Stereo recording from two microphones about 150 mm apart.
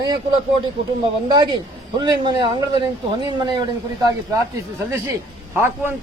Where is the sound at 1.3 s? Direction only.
30° right (ahead or behind).